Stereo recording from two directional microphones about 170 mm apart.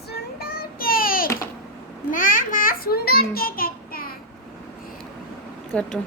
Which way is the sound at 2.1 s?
50° left (ahead or behind).